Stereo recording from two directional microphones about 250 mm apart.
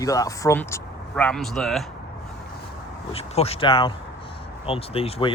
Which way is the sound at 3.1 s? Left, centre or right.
Left.